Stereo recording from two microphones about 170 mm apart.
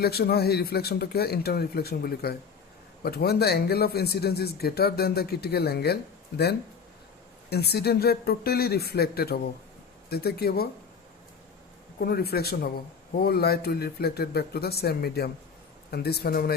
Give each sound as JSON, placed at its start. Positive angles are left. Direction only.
{"t": 0.0, "sound": "a man's voice", "side_deg": 70}
{"t": 11.9, "sound": "a man's voice", "side_deg": 65}